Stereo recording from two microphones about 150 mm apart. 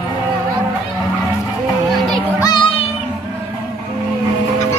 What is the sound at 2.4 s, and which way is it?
Music, 30° left (ahead or behind).